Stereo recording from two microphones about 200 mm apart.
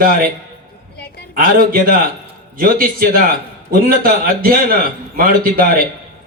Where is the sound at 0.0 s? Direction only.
45° right (ahead or behind).